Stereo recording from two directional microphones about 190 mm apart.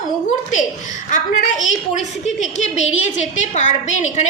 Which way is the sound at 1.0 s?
40° left (ahead or behind).